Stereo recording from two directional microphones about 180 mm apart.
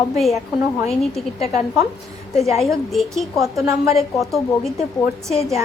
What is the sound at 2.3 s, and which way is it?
A woman's voice, centre (ahead or behind).